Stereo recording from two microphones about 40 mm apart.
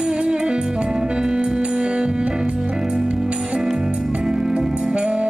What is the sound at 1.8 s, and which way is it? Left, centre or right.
Music, right.